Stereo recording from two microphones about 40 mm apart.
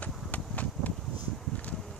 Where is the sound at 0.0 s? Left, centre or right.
Left.